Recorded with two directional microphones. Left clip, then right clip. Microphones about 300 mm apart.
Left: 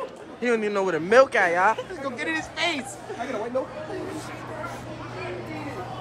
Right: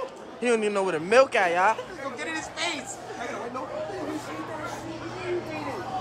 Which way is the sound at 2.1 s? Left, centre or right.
Left.